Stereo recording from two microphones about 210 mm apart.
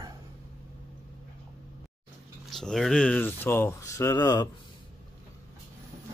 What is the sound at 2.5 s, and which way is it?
Speech, centre (ahead or behind).